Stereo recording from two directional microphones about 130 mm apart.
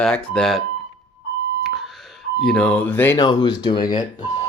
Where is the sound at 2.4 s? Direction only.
10° left (ahead or behind).